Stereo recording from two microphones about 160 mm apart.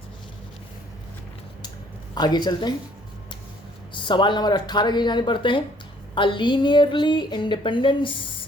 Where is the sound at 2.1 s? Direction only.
25° left (ahead or behind).